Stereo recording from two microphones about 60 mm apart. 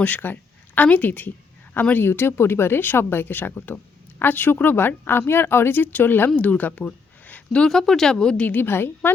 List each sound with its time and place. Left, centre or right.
0.0 s a woman's voice: left
7.6 s a woman's voice: centre
8.4 s speech: left